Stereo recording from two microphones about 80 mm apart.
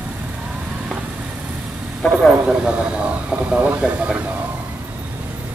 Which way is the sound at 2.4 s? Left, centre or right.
Centre.